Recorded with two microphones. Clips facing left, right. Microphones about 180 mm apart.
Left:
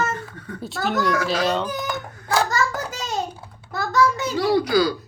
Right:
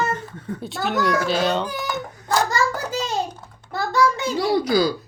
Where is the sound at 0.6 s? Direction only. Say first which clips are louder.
Even; centre (ahead or behind).